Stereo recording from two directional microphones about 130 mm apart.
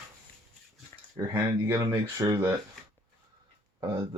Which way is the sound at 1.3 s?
20° right (ahead or behind).